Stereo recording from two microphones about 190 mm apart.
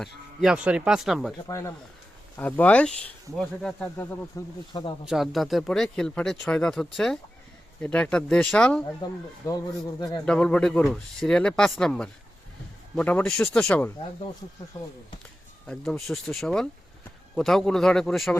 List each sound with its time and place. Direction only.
0.0 s speech: 5° right (ahead or behind)
1.5 s speech: 15° left (ahead or behind)
5.0 s speech: centre (ahead or behind)
9.0 s speech: 25° left (ahead or behind)
10.2 s speech: 5° left (ahead or behind)
14.7 s speech: 20° left (ahead or behind)
15.6 s speech: 5° left (ahead or behind)